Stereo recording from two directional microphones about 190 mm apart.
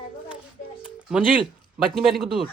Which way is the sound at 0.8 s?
5° right (ahead or behind).